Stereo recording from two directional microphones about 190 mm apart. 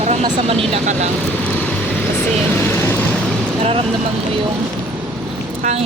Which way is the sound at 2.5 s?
10° left (ahead or behind).